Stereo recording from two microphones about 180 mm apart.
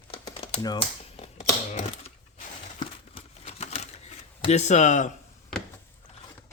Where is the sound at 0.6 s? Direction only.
30° left (ahead or behind).